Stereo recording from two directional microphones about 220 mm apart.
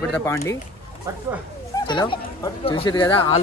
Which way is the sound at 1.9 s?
20° left (ahead or behind).